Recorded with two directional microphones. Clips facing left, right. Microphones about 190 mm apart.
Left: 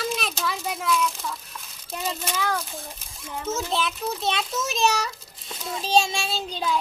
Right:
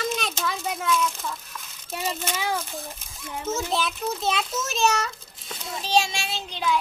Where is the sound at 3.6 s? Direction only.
Centre (ahead or behind).